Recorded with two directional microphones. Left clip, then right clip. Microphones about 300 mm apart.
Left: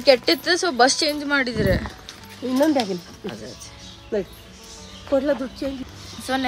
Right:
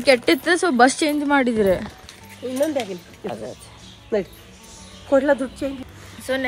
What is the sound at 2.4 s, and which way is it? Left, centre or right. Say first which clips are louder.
Speech: left 2 dB; left.